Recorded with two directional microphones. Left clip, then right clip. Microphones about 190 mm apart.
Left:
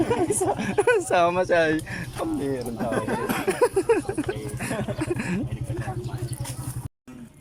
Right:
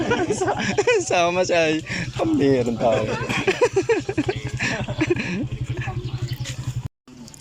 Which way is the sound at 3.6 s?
5° left (ahead or behind).